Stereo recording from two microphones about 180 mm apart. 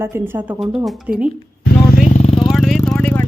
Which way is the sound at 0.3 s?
20° right (ahead or behind).